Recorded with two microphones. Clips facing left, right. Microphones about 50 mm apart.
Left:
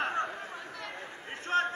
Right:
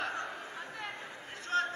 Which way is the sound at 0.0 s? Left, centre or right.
Left.